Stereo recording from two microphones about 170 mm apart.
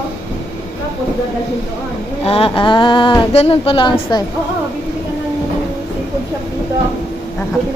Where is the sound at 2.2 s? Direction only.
35° left (ahead or behind).